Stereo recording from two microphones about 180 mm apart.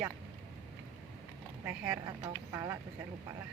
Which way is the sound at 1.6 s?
10° right (ahead or behind).